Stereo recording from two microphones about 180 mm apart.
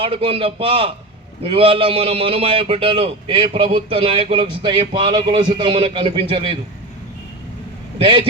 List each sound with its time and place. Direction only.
0.0 s a man's voice: 30° right (ahead or behind)
8.0 s a man's voice: 30° right (ahead or behind)